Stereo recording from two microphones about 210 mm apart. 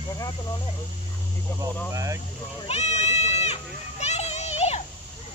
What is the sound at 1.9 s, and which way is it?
Speech, 15° right (ahead or behind).